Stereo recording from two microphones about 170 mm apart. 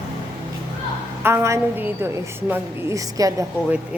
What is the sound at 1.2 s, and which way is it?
Speech, 15° right (ahead or behind).